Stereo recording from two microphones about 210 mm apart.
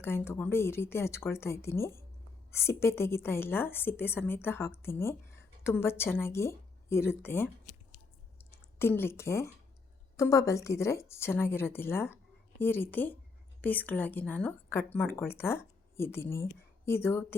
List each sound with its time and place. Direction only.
0.0 s speech: 10° left (ahead or behind)
8.4 s a sound: 10° left (ahead or behind)
10.2 s speech: 15° left (ahead or behind)